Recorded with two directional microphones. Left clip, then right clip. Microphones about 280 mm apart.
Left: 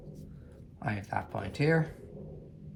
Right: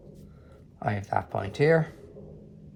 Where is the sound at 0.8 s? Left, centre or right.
Right.